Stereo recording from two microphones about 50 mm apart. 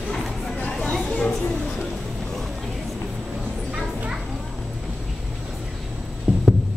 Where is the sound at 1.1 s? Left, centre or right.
Centre.